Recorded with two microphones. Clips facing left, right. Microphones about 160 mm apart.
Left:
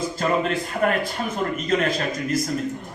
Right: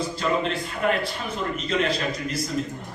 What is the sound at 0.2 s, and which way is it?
A man's voice, 45° left (ahead or behind).